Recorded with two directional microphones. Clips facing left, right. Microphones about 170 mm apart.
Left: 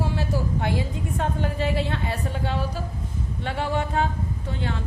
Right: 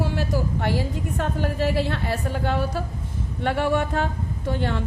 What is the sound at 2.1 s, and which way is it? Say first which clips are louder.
A woman's voice: right 3 dB; 50° right (ahead or behind).